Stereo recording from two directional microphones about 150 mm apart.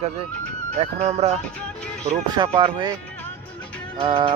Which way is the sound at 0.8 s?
45° right (ahead or behind).